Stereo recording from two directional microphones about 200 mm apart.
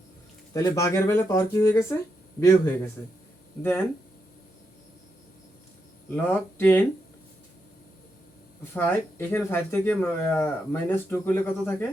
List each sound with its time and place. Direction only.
0.5 s speech: 15° left (ahead or behind)
3.0 s speech: 10° left (ahead or behind)
6.1 s speech: 10° left (ahead or behind)
8.7 s speech: 10° left (ahead or behind)